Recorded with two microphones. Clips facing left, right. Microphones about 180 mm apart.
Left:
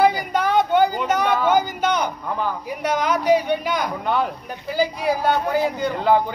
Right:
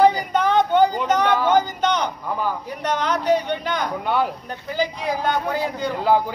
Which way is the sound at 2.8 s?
10° left (ahead or behind).